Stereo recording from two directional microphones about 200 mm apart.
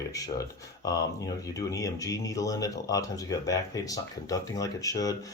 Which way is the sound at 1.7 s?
15° left (ahead or behind).